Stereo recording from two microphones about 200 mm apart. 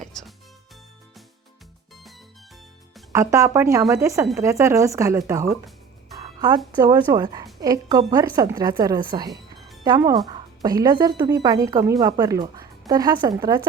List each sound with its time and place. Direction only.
3.1 s speech: 15° right (ahead or behind)
6.7 s speech: 20° right (ahead or behind)